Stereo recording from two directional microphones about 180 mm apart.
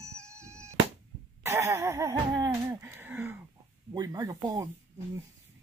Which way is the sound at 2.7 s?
15° right (ahead or behind).